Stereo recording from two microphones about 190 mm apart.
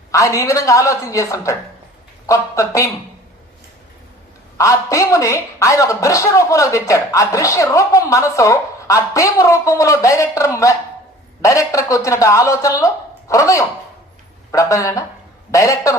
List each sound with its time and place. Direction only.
0.1 s speech: 15° left (ahead or behind)
4.5 s speech: 15° left (ahead or behind)